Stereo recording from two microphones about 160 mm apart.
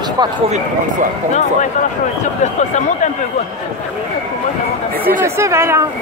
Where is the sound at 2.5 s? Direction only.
50° left (ahead or behind).